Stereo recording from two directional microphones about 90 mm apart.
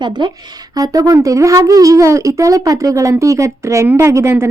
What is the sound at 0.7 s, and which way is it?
A woman's voice, 40° right (ahead or behind).